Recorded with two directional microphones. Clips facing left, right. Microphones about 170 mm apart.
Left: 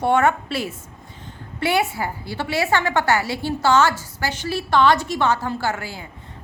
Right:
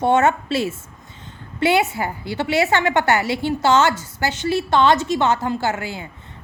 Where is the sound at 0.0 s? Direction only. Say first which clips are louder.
Right 2 dB; 20° right (ahead or behind).